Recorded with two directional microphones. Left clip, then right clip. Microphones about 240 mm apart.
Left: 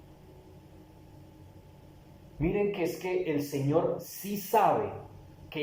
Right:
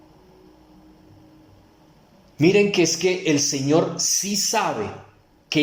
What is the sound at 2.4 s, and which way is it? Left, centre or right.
Speech, right.